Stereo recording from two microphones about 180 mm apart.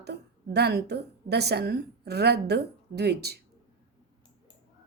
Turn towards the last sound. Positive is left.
turn(degrees=-65)  # may be behind; listen again after turning